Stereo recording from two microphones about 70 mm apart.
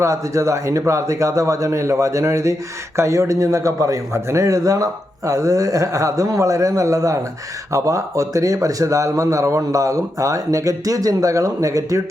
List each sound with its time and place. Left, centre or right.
0.0 s a man's voice: right